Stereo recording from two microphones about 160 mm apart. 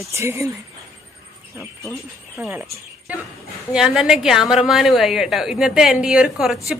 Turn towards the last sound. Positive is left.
turn(degrees=-5)  # may be behind; listen again after turning